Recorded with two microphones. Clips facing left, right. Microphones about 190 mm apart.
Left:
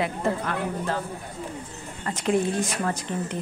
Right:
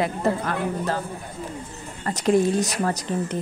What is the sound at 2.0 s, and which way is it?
Speech, 40° right (ahead or behind).